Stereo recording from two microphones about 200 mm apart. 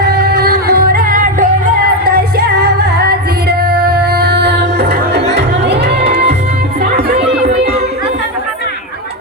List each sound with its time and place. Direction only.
0.1 s music: 50° right (ahead or behind)